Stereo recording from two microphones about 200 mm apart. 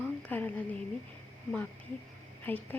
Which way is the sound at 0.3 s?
10° left (ahead or behind).